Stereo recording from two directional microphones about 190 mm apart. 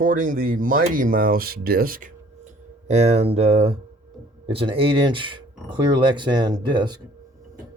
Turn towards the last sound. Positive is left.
turn(degrees=-25)  # may be behind; listen again after turning